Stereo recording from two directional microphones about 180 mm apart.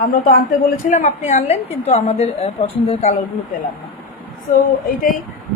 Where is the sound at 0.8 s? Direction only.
40° left (ahead or behind).